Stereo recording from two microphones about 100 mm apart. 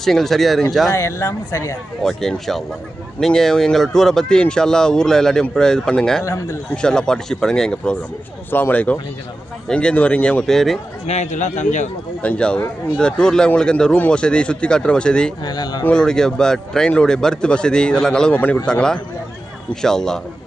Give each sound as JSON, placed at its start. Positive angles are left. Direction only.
{"t": 0.0, "sound": "speech", "side_deg": 0}
{"t": 0.9, "sound": "speech", "side_deg": 30}
{"t": 2.0, "sound": "speech", "side_deg": 5}
{"t": 6.2, "sound": "a man's voice", "side_deg": 30}
{"t": 6.7, "sound": "a man's voice", "side_deg": 5}
{"t": 8.4, "sound": "a man's voice", "side_deg": 20}
{"t": 11.1, "sound": "a man's voice", "side_deg": 90}
{"t": 12.2, "sound": "a man's voice", "side_deg": 10}
{"t": 15.4, "sound": "speech", "side_deg": 45}
{"t": 15.8, "sound": "a man's voice", "side_deg": 10}